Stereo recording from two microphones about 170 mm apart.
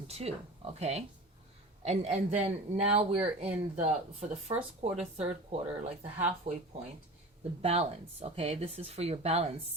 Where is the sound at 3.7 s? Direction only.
45° right (ahead or behind).